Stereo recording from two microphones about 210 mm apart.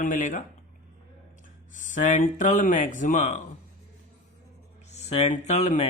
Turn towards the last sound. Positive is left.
turn(degrees=30)  # may be behind; listen again after turning